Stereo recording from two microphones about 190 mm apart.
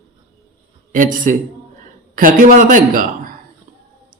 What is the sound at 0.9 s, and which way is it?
A man's voice, 45° right (ahead or behind).